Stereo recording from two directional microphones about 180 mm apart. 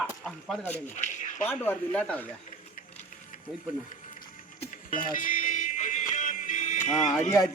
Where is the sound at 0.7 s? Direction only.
40° left (ahead or behind).